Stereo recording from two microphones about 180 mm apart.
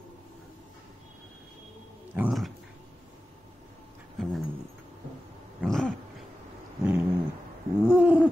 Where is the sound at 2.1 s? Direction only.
5° right (ahead or behind).